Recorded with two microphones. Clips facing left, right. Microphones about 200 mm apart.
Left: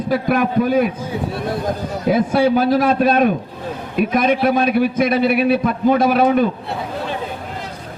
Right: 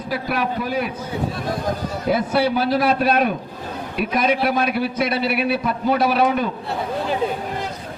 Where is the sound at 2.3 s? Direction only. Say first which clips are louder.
Left 5 dB; 50° left (ahead or behind).